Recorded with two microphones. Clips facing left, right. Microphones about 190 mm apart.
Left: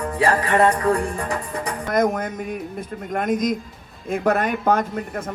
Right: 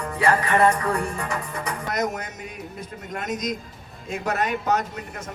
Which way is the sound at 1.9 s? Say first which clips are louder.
Left 8 dB; 50° left (ahead or behind).